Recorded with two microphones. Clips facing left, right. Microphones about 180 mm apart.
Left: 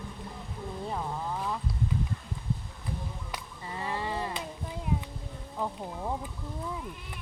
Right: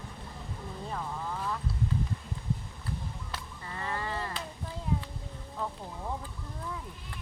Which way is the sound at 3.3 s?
15° left (ahead or behind).